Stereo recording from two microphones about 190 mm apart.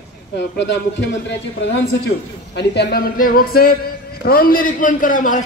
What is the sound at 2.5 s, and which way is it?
A man's voice, 60° left (ahead or behind).